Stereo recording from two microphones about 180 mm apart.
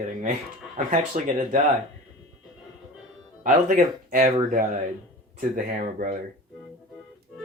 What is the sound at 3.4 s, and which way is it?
A man's voice, 45° right (ahead or behind).